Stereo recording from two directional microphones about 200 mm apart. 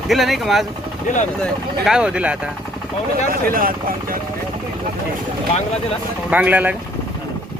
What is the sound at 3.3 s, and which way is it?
Speech, 45° right (ahead or behind).